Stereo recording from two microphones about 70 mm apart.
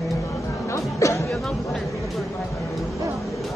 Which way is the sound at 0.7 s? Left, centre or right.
Left.